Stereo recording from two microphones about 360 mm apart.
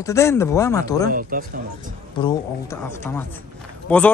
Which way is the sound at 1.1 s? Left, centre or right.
Right.